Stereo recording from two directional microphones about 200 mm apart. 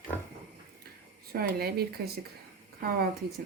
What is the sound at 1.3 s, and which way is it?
A woman's voice, 50° right (ahead or behind).